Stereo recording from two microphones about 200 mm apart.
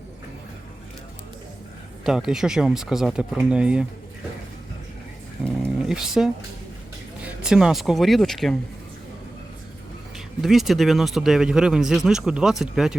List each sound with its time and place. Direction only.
2.0 s speech: centre (ahead or behind)
5.6 s a sound: 5° right (ahead or behind)
7.2 s speech: 5° right (ahead or behind)
10.4 s speech: centre (ahead or behind)